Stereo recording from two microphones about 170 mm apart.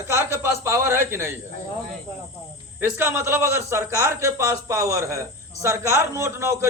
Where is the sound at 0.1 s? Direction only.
15° right (ahead or behind).